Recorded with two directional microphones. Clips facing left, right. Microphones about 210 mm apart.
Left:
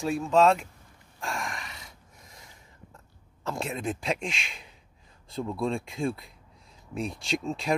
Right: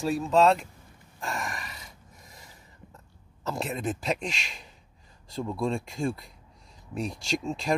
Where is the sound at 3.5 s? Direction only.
Centre (ahead or behind).